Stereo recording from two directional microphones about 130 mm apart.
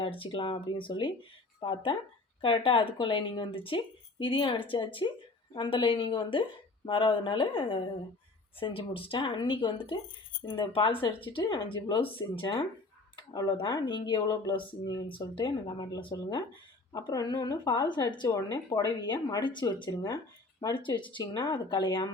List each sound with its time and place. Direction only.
0.0 s speech: 45° left (ahead or behind)
13.3 s speech: 30° left (ahead or behind)
20.7 s speech: 40° left (ahead or behind)